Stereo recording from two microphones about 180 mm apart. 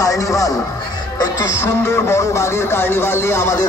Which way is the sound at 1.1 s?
20° left (ahead or behind).